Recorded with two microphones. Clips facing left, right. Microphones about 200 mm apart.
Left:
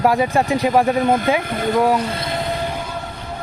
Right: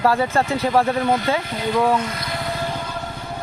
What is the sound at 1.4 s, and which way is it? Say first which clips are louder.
Speech: left 3 dB; 50° left (ahead or behind).